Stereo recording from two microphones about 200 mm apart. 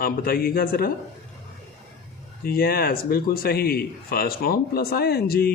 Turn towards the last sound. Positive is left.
turn(degrees=50)  # may be behind; listen again after turning